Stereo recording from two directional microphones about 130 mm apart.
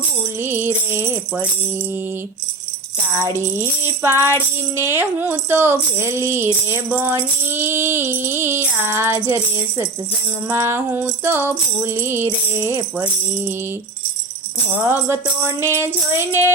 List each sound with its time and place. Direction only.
0.3 s tambourine: 15° right (ahead or behind)
3.2 s music: 20° right (ahead or behind)
4.8 s tambourine: 20° right (ahead or behind)
10.5 s music: 20° right (ahead or behind)
14.8 s music: 15° right (ahead or behind)